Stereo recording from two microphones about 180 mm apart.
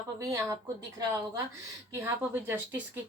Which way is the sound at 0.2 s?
20° right (ahead or behind).